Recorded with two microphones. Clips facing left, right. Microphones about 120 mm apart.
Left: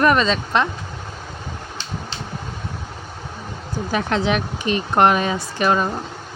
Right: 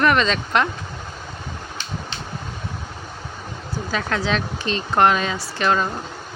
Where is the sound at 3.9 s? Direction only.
20° left (ahead or behind).